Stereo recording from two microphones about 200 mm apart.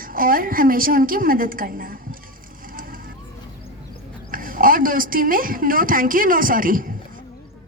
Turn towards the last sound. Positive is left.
turn(degrees=-45)  # may be behind; listen again after turning